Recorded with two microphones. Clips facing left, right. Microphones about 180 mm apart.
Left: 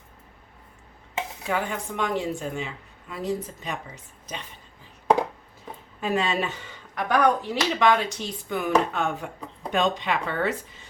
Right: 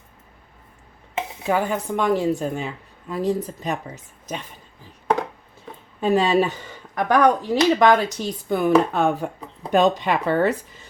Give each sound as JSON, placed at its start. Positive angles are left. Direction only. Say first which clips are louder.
{"t": 1.5, "sound": "speech", "louder": "right 7 dB", "side_deg": -40}
{"t": 6.0, "sound": "speech", "louder": "right 7 dB", "side_deg": -30}